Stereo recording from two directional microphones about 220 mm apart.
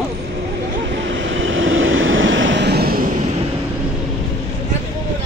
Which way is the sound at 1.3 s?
60° right (ahead or behind).